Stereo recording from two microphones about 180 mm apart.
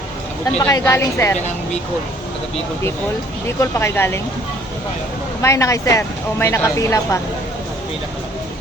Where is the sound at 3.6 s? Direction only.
15° left (ahead or behind).